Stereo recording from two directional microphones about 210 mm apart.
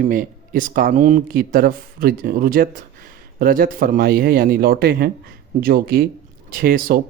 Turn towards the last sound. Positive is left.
turn(degrees=-45)  # may be behind; listen again after turning